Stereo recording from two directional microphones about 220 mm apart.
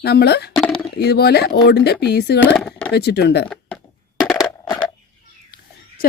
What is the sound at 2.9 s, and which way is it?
Speech, 50° left (ahead or behind).